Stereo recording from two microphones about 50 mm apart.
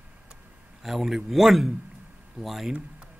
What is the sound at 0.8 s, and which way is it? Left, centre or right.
A man's voice, centre.